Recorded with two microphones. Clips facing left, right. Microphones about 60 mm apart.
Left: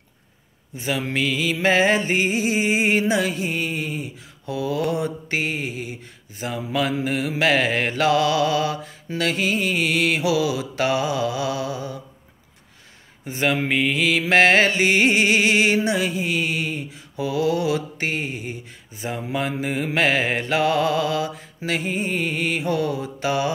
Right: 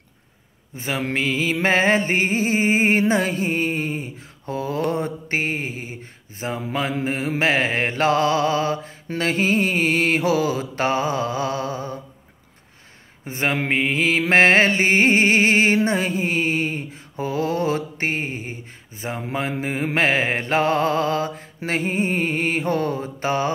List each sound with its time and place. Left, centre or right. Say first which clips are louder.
0.7 s mantra: even; right
13.2 s mantra: left 1 dB; right